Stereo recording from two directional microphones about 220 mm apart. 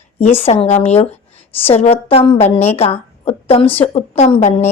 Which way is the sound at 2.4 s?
10° left (ahead or behind).